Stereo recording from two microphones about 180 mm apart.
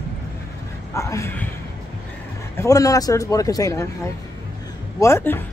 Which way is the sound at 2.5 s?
20° left (ahead or behind).